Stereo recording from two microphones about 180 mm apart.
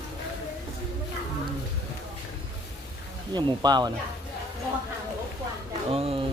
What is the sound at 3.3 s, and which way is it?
Speech, 25° right (ahead or behind).